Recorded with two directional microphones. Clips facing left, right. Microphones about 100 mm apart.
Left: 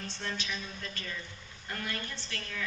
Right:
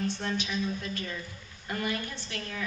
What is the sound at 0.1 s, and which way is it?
A woman's voice, 15° right (ahead or behind).